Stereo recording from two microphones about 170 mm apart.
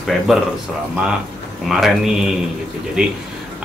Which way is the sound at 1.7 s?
Centre (ahead or behind).